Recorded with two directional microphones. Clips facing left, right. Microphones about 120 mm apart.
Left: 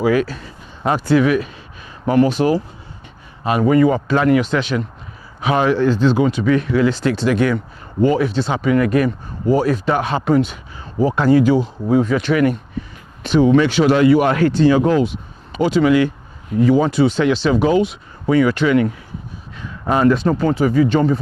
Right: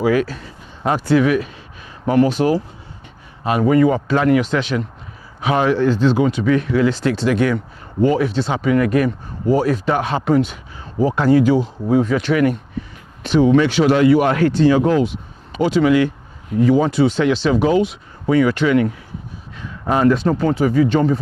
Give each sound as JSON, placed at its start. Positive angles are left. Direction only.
{"t": 0.0, "sound": "speech", "side_deg": 20}